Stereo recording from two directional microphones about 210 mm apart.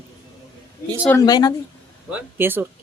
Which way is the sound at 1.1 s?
20° left (ahead or behind).